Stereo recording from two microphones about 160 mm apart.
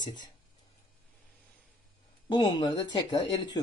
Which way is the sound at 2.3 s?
25° left (ahead or behind).